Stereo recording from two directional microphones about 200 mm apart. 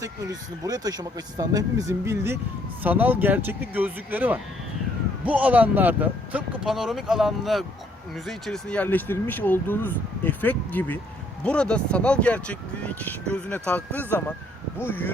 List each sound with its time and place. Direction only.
0.0 s speech: 15° right (ahead or behind); by 15.1 s 10° left (ahead or behind)